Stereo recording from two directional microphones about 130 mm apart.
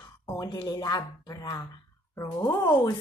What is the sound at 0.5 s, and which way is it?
Speech, 40° left (ahead or behind).